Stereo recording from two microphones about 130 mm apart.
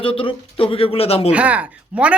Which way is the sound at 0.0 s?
45° left (ahead or behind).